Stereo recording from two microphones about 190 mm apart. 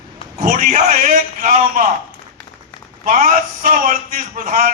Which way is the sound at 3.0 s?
45° right (ahead or behind).